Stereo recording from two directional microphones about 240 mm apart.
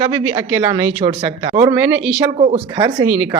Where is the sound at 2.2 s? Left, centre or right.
Right.